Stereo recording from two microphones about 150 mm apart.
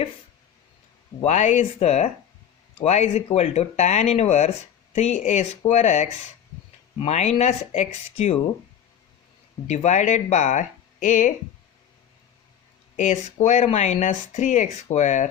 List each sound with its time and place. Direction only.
1.2 s speech: 50° left (ahead or behind)
9.6 s speech: 50° left (ahead or behind)
13.0 s speech: 50° left (ahead or behind)